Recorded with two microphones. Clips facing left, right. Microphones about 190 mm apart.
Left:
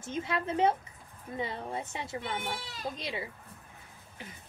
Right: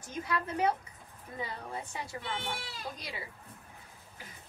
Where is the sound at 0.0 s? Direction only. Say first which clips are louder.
Left 2 dB; 25° left (ahead or behind).